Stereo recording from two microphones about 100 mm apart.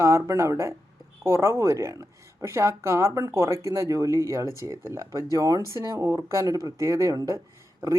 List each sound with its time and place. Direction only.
0.0 s speech: 30° right (ahead or behind)